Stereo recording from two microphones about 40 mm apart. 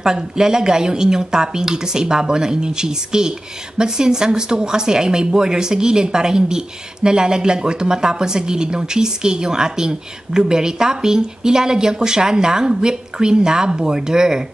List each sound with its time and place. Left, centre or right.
0.0 s speech: centre